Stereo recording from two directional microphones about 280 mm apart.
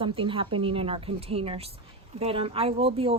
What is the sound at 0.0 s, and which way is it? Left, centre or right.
A woman's voice, centre.